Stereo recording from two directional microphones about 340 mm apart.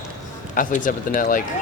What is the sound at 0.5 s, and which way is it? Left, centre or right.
Speech, left.